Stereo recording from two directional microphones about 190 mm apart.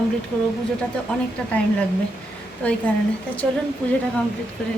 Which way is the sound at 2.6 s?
5° left (ahead or behind).